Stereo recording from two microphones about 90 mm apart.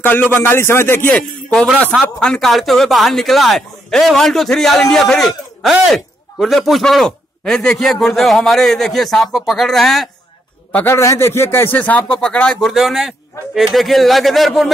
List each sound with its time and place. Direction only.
0.0 s speech: 20° left (ahead or behind)
1.1 s a man's voice: 10° left (ahead or behind)
10.7 s a man's voice: 15° left (ahead or behind)
11.0 s speech: 30° left (ahead or behind); by 14.7 s centre (ahead or behind)